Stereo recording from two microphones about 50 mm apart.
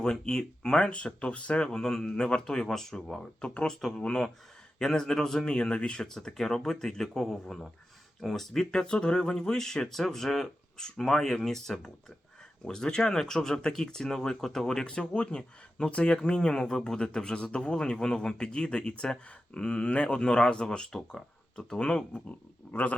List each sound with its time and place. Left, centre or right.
0.0 s speech: centre
3.4 s speech: left
14.8 s speech: centre
22.1 s speech: left